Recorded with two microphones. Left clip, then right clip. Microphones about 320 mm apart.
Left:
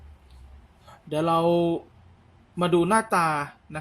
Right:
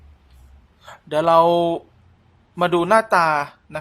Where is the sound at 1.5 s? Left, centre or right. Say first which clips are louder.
Right 5 dB; right.